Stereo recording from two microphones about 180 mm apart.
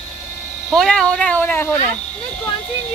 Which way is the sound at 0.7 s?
5° left (ahead or behind).